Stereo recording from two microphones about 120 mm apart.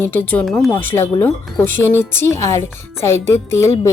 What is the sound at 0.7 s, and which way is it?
Speech, 15° left (ahead or behind).